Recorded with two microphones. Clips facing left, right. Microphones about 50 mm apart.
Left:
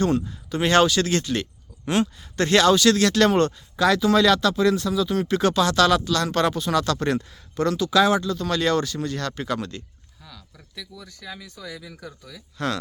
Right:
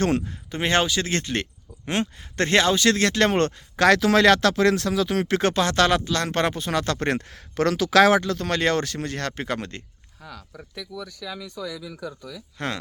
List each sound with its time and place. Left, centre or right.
0.5 s speech: right
1.1 s speech: right
3.8 s speech: right
5.4 s speech: right
7.2 s speech: right
8.4 s speech: right
12.5 s speech: right